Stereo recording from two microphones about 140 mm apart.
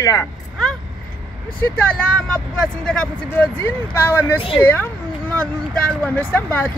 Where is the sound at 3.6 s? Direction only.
15° left (ahead or behind).